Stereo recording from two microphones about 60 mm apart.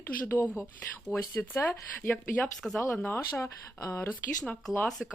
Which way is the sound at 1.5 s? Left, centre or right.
Left.